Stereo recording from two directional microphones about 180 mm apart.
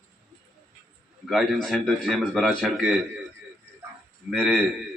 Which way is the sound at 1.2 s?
Centre (ahead or behind).